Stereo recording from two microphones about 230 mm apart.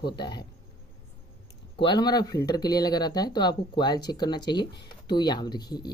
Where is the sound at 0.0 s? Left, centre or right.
Centre.